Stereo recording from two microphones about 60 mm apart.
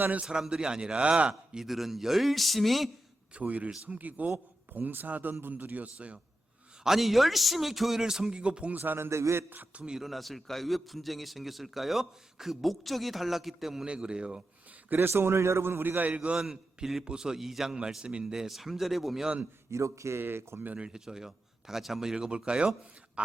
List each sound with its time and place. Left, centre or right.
0.0 s speech: right
0.3 s a man's voice: centre
3.3 s a man's voice: right
6.8 s a man's voice: centre
8.8 s a man's voice: right
9.0 s a sound: right
9.7 s a man's voice: centre
13.8 s a man's voice: centre
14.8 s a man's voice: right; by 16.5 s centre
16.5 s a man's voice: centre
19.7 s speech: right
20.1 s a man's voice: right
20.7 s a man's voice: centre